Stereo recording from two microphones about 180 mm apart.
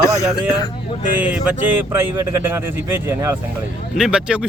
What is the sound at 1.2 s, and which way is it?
Speech, 5° right (ahead or behind).